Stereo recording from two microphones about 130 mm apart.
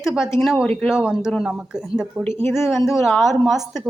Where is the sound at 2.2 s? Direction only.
20° left (ahead or behind).